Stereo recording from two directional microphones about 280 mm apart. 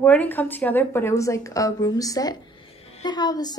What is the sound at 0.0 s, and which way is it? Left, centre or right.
A woman's voice, centre.